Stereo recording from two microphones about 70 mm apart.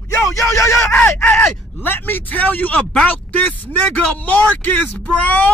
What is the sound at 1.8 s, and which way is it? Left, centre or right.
Speech, left.